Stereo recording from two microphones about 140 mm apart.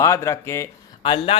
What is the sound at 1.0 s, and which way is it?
Speech, 40° left (ahead or behind).